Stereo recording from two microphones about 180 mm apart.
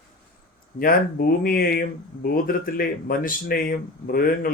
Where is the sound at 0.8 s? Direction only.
55° left (ahead or behind).